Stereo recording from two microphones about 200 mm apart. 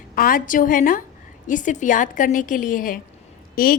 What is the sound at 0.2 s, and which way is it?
A woman's voice, 45° left (ahead or behind).